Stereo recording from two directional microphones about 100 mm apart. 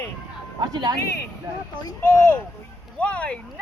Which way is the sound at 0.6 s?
45° right (ahead or behind).